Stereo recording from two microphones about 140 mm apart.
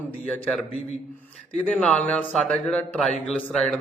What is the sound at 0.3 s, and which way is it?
Speech, 10° left (ahead or behind).